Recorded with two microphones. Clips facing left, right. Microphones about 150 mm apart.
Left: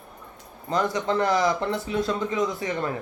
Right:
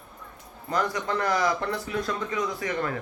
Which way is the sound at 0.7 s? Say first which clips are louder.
Left 3 dB; 25° left (ahead or behind).